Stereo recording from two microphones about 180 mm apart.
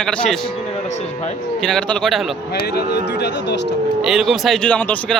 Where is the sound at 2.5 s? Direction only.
65° left (ahead or behind).